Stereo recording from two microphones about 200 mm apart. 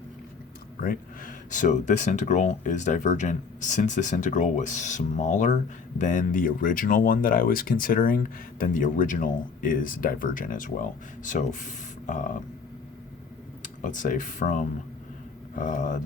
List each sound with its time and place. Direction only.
0.8 s speech: 45° left (ahead or behind)
13.6 s speech: 40° left (ahead or behind)